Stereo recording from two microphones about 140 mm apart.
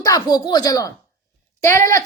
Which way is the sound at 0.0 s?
25° left (ahead or behind).